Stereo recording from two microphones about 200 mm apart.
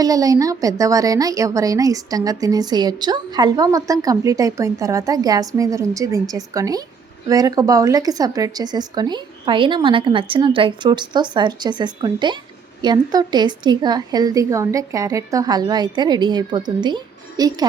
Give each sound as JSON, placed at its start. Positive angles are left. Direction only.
{"t": 0.0, "sound": "a woman's voice", "side_deg": -15}